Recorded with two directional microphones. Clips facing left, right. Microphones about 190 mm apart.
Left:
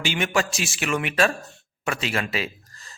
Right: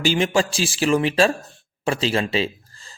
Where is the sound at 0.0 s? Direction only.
30° right (ahead or behind).